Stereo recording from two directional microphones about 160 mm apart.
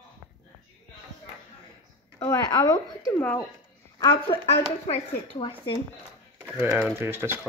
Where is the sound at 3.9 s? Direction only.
25° left (ahead or behind).